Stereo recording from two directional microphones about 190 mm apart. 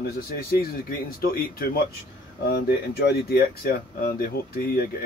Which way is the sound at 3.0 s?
55° left (ahead or behind).